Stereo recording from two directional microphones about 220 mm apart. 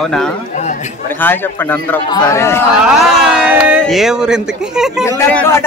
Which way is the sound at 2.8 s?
5° right (ahead or behind).